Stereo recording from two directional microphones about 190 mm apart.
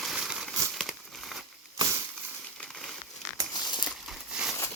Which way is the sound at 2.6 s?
Centre (ahead or behind).